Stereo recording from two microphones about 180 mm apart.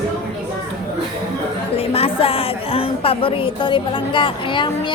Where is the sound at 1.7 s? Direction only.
35° left (ahead or behind).